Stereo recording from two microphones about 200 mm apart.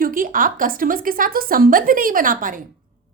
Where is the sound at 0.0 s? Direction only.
45° right (ahead or behind).